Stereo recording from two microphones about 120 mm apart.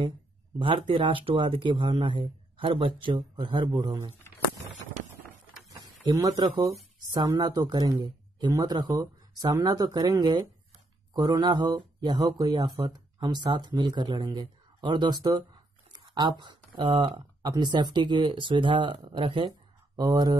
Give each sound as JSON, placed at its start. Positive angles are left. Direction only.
{"t": 0.6, "sound": "speech", "side_deg": -45}
{"t": 5.7, "sound": "a sound", "side_deg": -30}
{"t": 7.2, "sound": "speech", "side_deg": -35}
{"t": 15.9, "sound": "a sound", "side_deg": -40}
{"t": 16.9, "sound": "speech", "side_deg": -40}
{"t": 20.0, "sound": "speech", "side_deg": -35}